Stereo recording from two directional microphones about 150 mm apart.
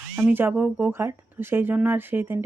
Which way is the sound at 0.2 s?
15° right (ahead or behind).